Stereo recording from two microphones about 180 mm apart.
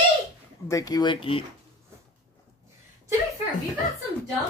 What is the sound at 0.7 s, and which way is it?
Speech, 20° left (ahead or behind).